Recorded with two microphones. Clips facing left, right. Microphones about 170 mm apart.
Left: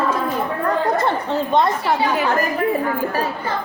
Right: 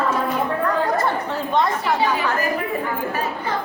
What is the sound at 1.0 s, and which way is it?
Speech, 20° left (ahead or behind).